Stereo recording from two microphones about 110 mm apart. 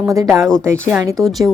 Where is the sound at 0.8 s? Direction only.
25° right (ahead or behind).